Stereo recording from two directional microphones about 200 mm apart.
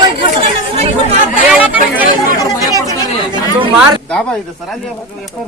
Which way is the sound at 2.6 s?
15° right (ahead or behind).